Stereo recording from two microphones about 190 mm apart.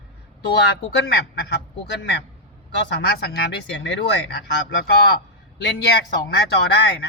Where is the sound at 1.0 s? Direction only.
60° left (ahead or behind).